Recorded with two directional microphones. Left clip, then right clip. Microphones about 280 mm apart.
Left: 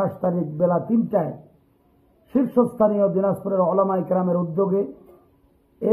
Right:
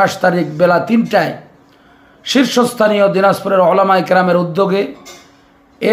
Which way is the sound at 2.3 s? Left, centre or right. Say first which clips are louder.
Right 7 dB; right.